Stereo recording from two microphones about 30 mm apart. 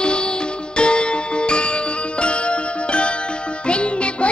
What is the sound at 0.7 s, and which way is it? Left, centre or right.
Music, left.